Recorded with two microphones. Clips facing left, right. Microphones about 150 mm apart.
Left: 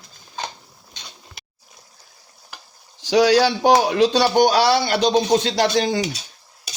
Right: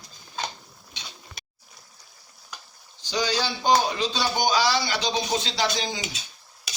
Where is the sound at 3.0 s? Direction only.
90° left; by 6.0 s 55° left (ahead or behind).